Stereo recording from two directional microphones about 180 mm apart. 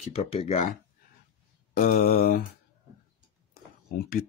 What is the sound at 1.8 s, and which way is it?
Speech, 55° left (ahead or behind).